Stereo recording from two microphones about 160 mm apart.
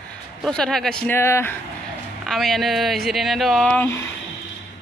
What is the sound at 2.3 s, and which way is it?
Speech, centre (ahead or behind).